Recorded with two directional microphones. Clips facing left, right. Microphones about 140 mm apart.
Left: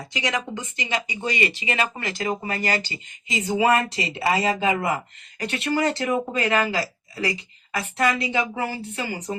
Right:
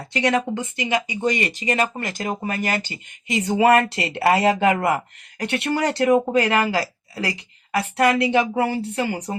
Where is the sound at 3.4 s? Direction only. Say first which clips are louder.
Right 4 dB; 65° right (ahead or behind).